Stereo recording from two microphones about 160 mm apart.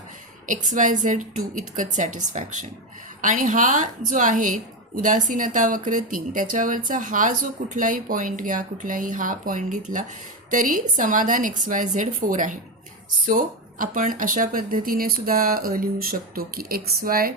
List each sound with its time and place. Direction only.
0.4 s a woman's voice: 55° right (ahead or behind)